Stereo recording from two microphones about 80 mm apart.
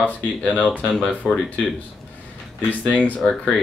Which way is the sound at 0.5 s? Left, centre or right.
Centre.